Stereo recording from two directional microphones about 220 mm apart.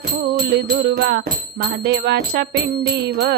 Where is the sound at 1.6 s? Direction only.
50° right (ahead or behind).